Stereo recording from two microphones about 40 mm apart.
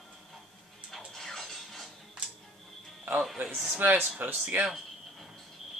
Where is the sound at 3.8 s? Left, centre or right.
Right.